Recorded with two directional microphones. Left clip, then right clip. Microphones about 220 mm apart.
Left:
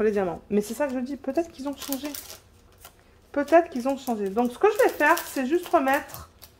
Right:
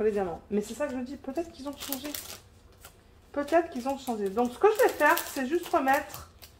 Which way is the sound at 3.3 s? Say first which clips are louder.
Left 6 dB; 45° left (ahead or behind).